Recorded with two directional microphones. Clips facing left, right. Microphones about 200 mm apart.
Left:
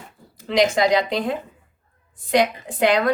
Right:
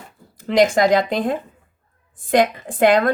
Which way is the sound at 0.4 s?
50° right (ahead or behind).